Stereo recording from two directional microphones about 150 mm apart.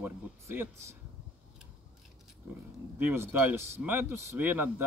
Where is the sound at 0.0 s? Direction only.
15° right (ahead or behind).